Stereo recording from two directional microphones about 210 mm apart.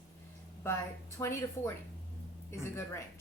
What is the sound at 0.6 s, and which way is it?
A woman's voice, 10° left (ahead or behind).